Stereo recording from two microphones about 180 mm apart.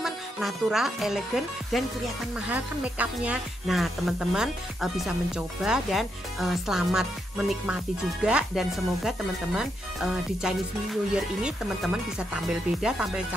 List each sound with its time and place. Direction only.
0.0 s speech: centre (ahead or behind)